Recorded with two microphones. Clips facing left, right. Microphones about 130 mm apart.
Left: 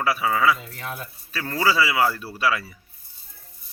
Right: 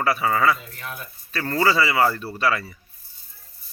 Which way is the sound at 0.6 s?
25° left (ahead or behind).